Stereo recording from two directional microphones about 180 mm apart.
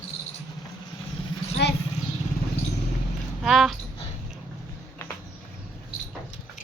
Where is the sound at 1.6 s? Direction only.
70° left (ahead or behind).